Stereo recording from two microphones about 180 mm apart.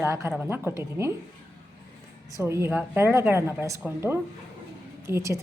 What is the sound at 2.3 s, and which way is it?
A woman's voice, 15° right (ahead or behind).